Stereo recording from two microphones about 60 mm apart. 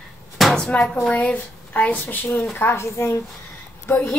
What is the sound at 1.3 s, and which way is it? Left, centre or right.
A woman's voice, left.